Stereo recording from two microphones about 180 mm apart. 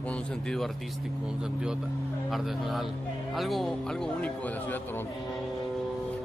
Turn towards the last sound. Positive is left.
turn(degrees=10)  # may be behind; listen again after turning